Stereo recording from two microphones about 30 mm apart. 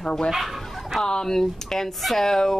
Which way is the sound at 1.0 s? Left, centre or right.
Left.